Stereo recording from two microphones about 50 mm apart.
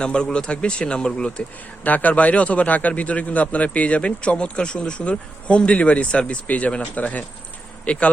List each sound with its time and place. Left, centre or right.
0.0 s a man's voice: centre
1.8 s a man's voice: left